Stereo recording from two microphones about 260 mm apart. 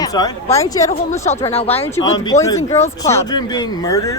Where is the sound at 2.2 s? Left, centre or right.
Centre.